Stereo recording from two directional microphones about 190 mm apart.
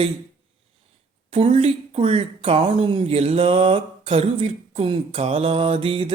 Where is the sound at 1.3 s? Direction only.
30° right (ahead or behind).